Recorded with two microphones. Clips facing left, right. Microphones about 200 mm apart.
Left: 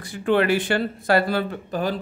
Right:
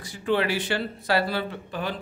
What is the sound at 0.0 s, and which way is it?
Speech, 55° left (ahead or behind).